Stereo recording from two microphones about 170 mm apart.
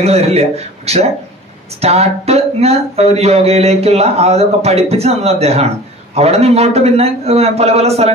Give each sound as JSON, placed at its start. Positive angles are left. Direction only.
{"t": 0.0, "sound": "speech", "side_deg": -40}